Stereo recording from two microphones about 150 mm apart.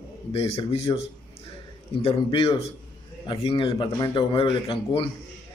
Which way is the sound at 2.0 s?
40° left (ahead or behind).